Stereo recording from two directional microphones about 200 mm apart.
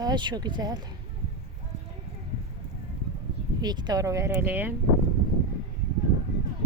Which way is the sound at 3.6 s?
20° right (ahead or behind).